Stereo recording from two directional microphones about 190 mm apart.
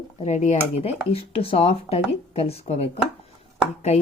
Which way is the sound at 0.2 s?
35° left (ahead or behind).